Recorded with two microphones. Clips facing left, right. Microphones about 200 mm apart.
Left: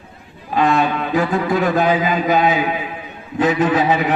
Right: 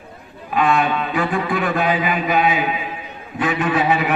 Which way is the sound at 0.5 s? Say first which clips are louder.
Left 1 dB; 40° left (ahead or behind).